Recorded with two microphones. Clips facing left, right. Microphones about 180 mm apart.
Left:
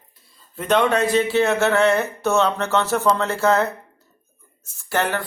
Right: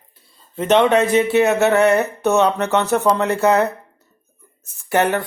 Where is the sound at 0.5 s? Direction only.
25° right (ahead or behind).